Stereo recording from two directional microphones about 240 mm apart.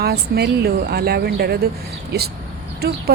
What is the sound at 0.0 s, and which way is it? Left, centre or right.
Speech, right.